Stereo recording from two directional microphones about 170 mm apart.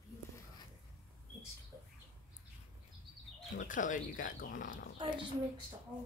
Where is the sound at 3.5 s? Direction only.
50° left (ahead or behind).